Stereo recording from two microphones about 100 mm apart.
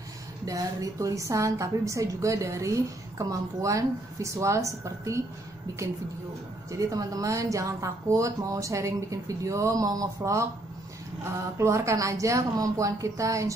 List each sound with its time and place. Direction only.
0.5 s a woman's voice: 35° right (ahead or behind)
6.7 s a woman's voice: 35° right (ahead or behind)
11.5 s a woman's voice: 30° right (ahead or behind)